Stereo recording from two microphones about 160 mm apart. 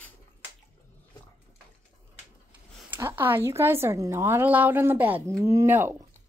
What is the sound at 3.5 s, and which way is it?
Speech, 15° right (ahead or behind).